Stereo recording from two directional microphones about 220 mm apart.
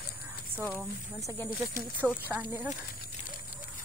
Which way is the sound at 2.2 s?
10° right (ahead or behind).